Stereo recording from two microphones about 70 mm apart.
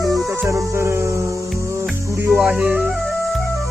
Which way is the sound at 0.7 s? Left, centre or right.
Right.